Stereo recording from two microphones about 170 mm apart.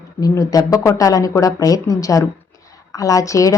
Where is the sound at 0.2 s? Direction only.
20° left (ahead or behind).